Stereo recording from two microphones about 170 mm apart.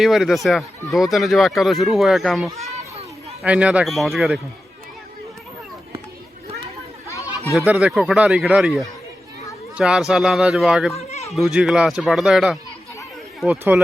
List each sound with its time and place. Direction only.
0.0 s speech: centre (ahead or behind)
7.1 s chatter: 20° left (ahead or behind)
7.5 s speech: 5° right (ahead or behind)
10.9 s a sound: 40° left (ahead or behind)
11.3 s speech: centre (ahead or behind)